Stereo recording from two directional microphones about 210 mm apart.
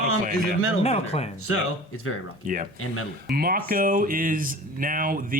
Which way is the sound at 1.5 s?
85° left.